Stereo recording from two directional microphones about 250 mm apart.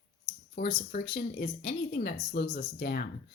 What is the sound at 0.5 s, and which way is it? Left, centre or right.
Speech, left.